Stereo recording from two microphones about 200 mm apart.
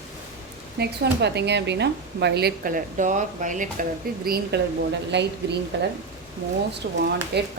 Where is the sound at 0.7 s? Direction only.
55° right (ahead or behind); by 3.6 s 40° right (ahead or behind).